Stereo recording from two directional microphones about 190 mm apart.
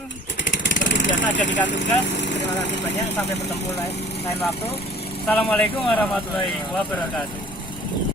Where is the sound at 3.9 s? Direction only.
60° left (ahead or behind).